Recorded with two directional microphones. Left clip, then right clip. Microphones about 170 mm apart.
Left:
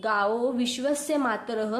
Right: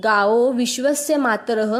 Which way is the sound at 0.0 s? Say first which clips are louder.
Right 9 dB; 40° right (ahead or behind).